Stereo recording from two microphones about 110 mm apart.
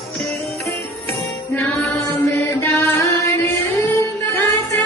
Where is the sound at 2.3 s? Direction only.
25° left (ahead or behind).